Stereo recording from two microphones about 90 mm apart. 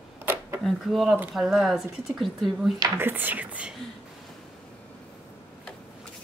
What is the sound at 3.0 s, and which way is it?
Speech, 20° right (ahead or behind).